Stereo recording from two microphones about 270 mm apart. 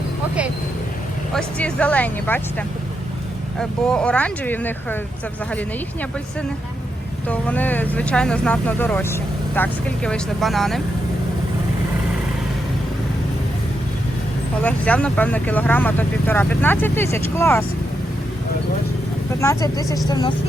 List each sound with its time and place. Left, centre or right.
1.3 s speech: centre
7.3 s speech: centre
14.6 s speech: centre
19.4 s speech: centre